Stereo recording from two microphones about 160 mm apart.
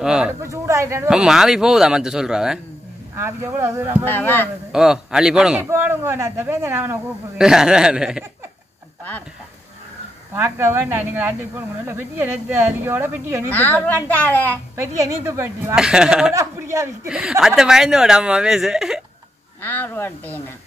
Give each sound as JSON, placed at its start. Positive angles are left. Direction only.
{"t": 0.0, "sound": "a woman's voice", "side_deg": -5}
{"t": 0.3, "sound": "speech", "side_deg": -20}
{"t": 1.0, "sound": "a woman's voice", "side_deg": -5}
{"t": 3.2, "sound": "speech", "side_deg": -15}
{"t": 4.0, "sound": "speech", "side_deg": 10}
{"t": 4.7, "sound": "speech", "side_deg": -5}
{"t": 7.3, "sound": "a woman's voice", "side_deg": -5}
{"t": 10.3, "sound": "speech", "side_deg": -15}
{"t": 13.5, "sound": "speech", "side_deg": 10}
{"t": 15.0, "sound": "speech", "side_deg": -20}
{"t": 15.7, "sound": "a woman's voice", "side_deg": -5}
{"t": 16.3, "sound": "speech", "side_deg": -20}
{"t": 17.1, "sound": "a woman's voice", "side_deg": -5}
{"t": 19.6, "sound": "speech", "side_deg": 10}